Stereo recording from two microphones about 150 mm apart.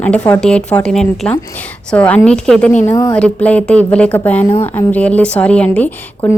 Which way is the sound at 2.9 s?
25° left (ahead or behind).